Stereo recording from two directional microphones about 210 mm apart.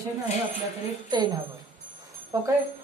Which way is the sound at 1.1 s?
20° right (ahead or behind).